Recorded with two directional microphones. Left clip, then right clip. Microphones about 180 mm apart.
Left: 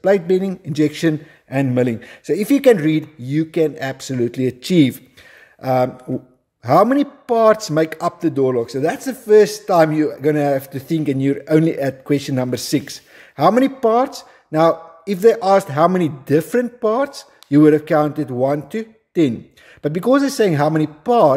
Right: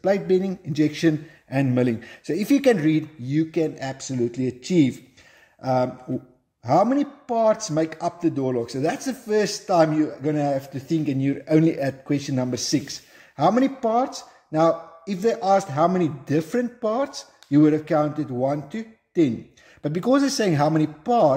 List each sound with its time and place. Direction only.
0.0 s a man's voice: 30° left (ahead or behind)
12.2 s a man's voice: 35° left (ahead or behind)